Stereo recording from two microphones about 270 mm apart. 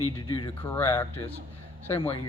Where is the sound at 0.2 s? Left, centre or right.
Centre.